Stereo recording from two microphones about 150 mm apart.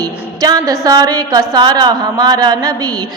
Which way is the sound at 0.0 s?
25° right (ahead or behind).